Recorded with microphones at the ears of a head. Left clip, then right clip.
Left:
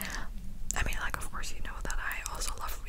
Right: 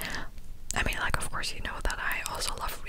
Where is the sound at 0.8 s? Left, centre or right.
Right.